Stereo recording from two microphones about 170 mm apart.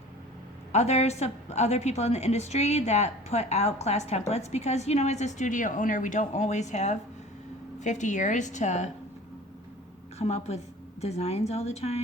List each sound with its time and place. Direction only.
0.7 s a woman's voice: 40° left (ahead or behind)
10.2 s a woman's voice: 40° left (ahead or behind)